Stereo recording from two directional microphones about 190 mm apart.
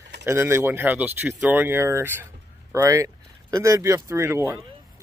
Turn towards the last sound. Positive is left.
turn(degrees=-15)  # may be behind; listen again after turning